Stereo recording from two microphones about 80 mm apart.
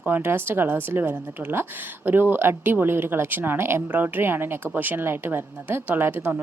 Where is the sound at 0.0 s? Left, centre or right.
Right.